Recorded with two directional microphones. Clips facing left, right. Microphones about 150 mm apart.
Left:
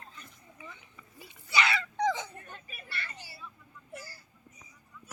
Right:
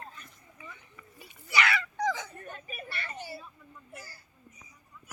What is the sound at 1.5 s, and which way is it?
Dog, 25° left (ahead or behind).